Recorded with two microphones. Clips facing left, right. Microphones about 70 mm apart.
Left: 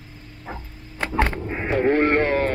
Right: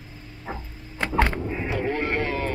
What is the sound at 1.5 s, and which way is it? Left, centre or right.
Sheep, left.